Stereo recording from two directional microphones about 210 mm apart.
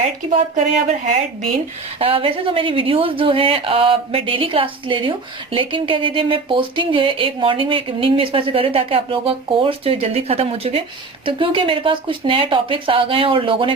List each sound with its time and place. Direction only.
0.0 s speech: 30° right (ahead or behind)
2.0 s speech: 25° right (ahead or behind)